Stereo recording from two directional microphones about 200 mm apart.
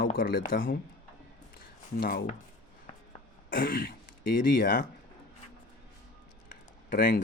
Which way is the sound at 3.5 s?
45° left (ahead or behind).